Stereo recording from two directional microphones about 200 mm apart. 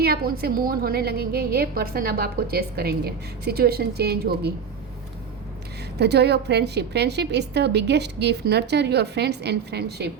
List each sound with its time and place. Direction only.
0.0 s a woman's voice: 50° right (ahead or behind)
6.0 s a woman's voice: 55° right (ahead or behind)